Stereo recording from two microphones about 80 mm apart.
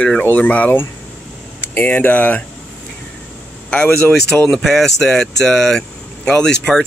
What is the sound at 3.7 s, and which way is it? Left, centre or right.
Speech, centre.